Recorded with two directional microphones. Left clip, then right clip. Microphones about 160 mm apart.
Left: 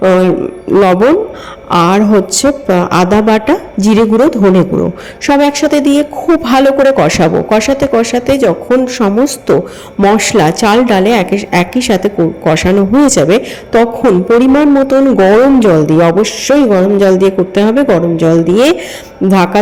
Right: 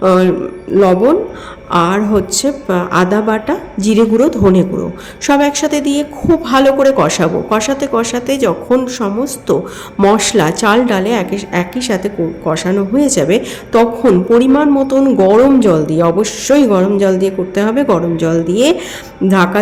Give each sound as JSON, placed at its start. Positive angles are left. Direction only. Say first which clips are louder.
{"t": 0.0, "sound": "a woman's voice", "louder": "left 2 dB", "side_deg": 25}
{"t": 0.8, "sound": "a man's voice", "louder": "left 2 dB", "side_deg": 35}